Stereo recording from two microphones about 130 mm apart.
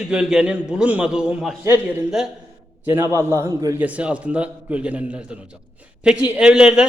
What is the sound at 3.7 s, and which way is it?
A man's voice, 10° right (ahead or behind).